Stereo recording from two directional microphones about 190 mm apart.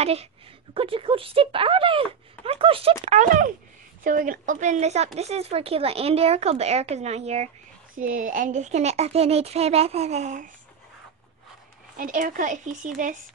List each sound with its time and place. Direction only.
0.0 s speech: 30° right (ahead or behind)
3.1 s speech: 40° right (ahead or behind)
7.9 s speech: 45° right (ahead or behind)
12.0 s speech: 45° right (ahead or behind)